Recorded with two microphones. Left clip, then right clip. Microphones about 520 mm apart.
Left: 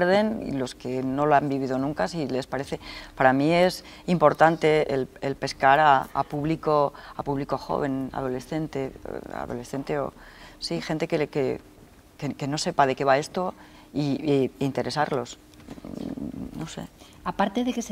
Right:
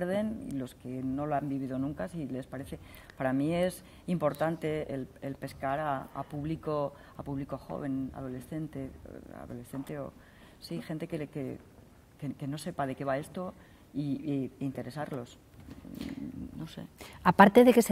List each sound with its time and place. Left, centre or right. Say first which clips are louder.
0.0 s speech: left 11 dB; left
16.5 s speech: left 9 dB; left
17.2 s a woman's voice: right 6 dB; right